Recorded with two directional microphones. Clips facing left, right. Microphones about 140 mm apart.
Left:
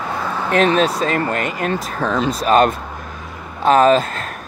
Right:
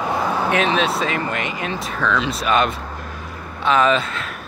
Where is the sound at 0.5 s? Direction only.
40° left (ahead or behind).